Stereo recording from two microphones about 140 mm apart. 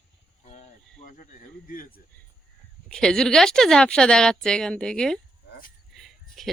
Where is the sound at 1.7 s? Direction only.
90° left.